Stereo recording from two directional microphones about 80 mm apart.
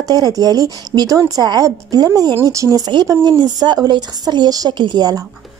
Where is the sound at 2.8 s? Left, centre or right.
Right.